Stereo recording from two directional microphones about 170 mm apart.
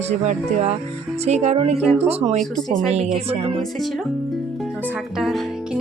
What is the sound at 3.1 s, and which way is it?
Speech, 35° right (ahead or behind).